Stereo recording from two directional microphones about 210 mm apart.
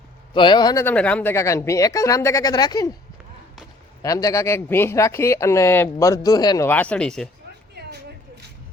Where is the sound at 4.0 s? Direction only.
15° left (ahead or behind).